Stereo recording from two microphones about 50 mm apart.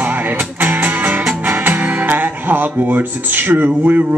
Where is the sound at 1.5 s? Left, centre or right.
Right.